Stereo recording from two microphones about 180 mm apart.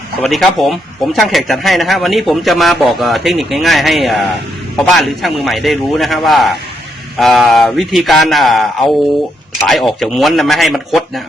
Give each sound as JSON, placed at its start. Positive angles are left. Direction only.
{"t": 0.2, "sound": "a man's voice", "side_deg": 0}